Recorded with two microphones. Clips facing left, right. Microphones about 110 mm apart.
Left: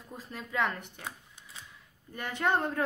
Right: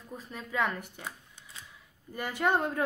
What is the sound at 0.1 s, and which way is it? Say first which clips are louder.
Speech: even; centre (ahead or behind).